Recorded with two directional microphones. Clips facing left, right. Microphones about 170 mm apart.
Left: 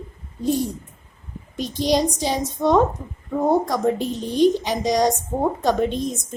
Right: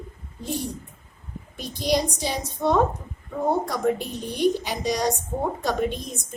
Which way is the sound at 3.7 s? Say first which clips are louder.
Left 3 dB; 20° left (ahead or behind).